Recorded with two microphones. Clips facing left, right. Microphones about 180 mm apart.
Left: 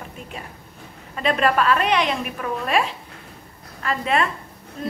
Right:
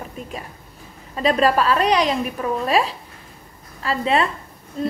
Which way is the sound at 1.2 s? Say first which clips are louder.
Right 2 dB; 35° right (ahead or behind).